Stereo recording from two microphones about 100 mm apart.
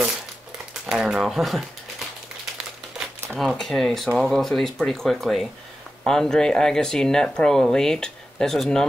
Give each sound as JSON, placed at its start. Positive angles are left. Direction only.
{"t": 0.8, "sound": "speech", "side_deg": -5}
{"t": 3.3, "sound": "speech", "side_deg": 0}